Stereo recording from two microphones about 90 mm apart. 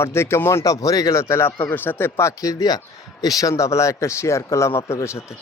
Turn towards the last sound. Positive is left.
turn(degrees=30)  # may be behind; listen again after turning